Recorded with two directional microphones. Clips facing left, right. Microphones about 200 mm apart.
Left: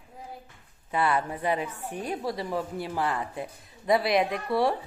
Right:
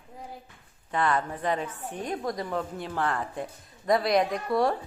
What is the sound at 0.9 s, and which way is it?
A woman's voice, 10° left (ahead or behind).